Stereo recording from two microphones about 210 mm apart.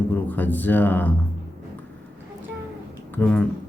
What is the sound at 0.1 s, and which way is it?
Speech, 10° left (ahead or behind).